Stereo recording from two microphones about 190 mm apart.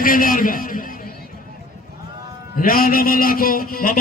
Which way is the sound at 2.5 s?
50° left (ahead or behind).